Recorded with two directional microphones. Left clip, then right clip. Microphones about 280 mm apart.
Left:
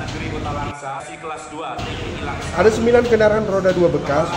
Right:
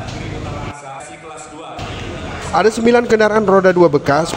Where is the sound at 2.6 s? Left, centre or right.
Right.